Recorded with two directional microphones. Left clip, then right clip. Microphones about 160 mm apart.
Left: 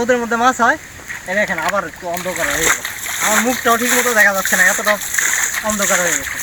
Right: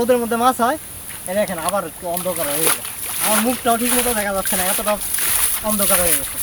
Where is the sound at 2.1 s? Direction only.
5° left (ahead or behind).